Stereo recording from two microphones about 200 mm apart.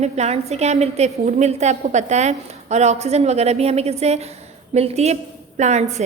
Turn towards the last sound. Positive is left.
turn(degrees=-35)  # may be behind; listen again after turning